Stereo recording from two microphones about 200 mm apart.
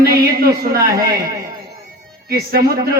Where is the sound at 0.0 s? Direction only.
50° right (ahead or behind).